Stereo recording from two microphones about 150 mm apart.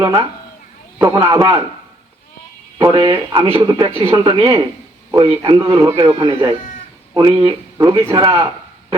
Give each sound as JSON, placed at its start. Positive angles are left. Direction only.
{"t": 0.0, "sound": "speech", "side_deg": -25}
{"t": 2.7, "sound": "speech", "side_deg": -30}